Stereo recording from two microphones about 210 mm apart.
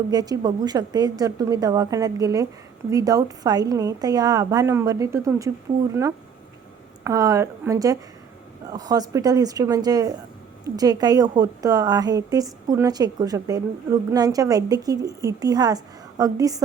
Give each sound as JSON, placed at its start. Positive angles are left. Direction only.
{"t": 0.1, "sound": "a woman's voice", "side_deg": -20}